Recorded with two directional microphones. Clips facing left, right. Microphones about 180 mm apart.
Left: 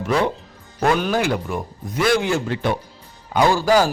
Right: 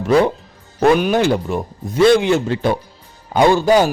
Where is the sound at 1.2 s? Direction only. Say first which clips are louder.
Right 5 dB; 30° right (ahead or behind).